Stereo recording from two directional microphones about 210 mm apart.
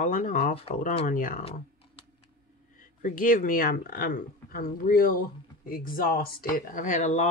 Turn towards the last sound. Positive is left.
turn(degrees=35)  # may be behind; listen again after turning